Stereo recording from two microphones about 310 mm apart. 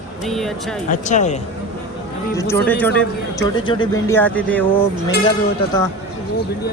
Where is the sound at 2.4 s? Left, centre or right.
Centre.